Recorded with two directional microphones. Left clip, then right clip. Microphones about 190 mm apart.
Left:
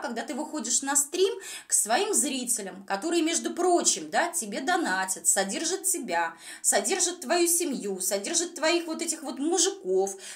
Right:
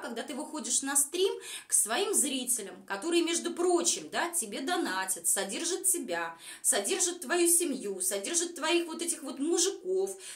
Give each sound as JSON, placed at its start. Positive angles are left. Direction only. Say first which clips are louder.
{"t": 0.0, "sound": "speech", "louder": "left 5 dB", "side_deg": 25}